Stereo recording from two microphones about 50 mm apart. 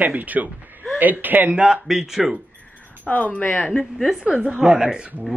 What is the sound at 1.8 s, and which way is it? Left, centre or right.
Speech, centre.